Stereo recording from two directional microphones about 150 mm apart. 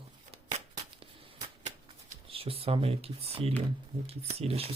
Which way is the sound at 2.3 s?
40° right (ahead or behind).